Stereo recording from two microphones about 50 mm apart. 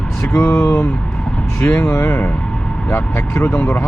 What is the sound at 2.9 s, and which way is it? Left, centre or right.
Speech, left.